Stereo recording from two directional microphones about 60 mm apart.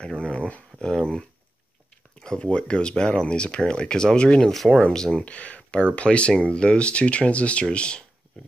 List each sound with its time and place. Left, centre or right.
0.0 s speech: centre